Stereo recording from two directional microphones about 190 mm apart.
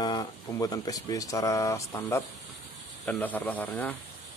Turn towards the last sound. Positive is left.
turn(degrees=10)  # may be behind; listen again after turning